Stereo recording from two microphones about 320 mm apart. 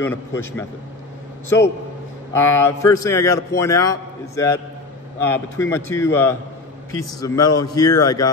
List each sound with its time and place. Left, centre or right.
0.0 s a man's voice: centre
2.3 s a man's voice: centre